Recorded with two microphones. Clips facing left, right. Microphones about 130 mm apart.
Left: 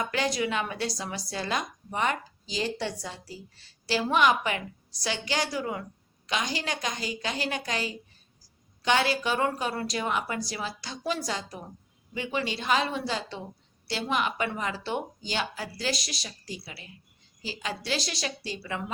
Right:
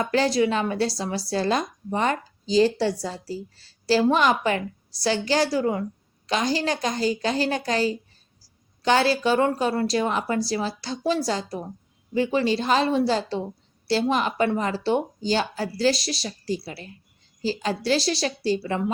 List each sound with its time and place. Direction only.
0.0 s speech: 35° right (ahead or behind)